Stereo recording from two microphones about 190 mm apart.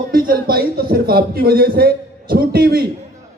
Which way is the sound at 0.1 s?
50° right (ahead or behind).